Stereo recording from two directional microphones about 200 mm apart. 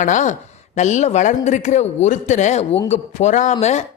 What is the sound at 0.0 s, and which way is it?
Speech, 35° left (ahead or behind).